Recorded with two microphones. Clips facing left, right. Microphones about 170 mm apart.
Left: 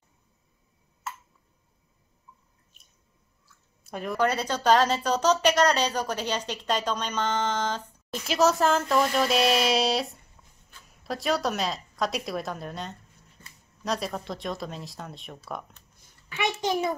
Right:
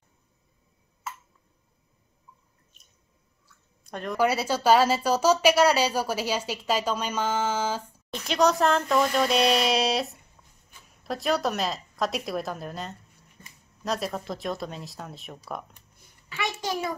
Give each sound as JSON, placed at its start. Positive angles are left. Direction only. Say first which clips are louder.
{"t": 3.4, "sound": "chewing", "louder": "left 1 dB", "side_deg": 5}
{"t": 4.2, "sound": "speech", "louder": "right 2 dB", "side_deg": -10}
{"t": 16.3, "sound": "a child's voice", "louder": "left 3 dB", "side_deg": 20}